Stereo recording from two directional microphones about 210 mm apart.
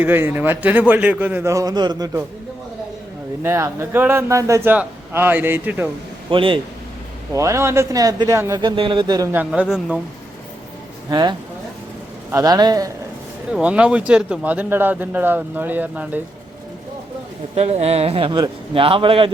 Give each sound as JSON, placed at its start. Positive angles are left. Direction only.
{"t": 0.0, "sound": "a man's voice", "side_deg": -10}
{"t": 3.4, "sound": "a man's voice", "side_deg": -10}
{"t": 6.3, "sound": "a man's voice", "side_deg": -25}
{"t": 7.3, "sound": "a man's voice", "side_deg": -15}
{"t": 11.1, "sound": "a man's voice", "side_deg": -20}
{"t": 13.5, "sound": "a man's voice", "side_deg": -5}
{"t": 17.5, "sound": "a man's voice", "side_deg": -30}